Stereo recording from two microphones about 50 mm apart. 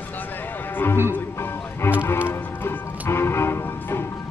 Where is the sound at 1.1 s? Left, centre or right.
Left.